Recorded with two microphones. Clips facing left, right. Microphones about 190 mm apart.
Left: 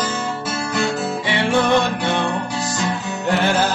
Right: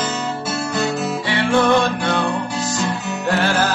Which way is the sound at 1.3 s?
15° left (ahead or behind).